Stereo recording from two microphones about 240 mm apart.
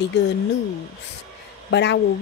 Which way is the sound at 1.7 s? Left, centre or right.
Left.